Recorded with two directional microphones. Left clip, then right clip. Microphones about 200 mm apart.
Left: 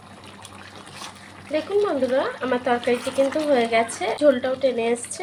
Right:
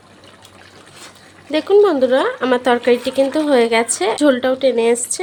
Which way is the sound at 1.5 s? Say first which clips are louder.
Right 9 dB; 65° right (ahead or behind).